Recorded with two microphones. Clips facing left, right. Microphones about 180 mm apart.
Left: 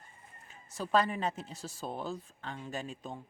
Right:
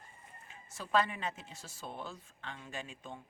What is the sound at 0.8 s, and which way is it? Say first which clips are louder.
Speech: left 3 dB; 40° left (ahead or behind).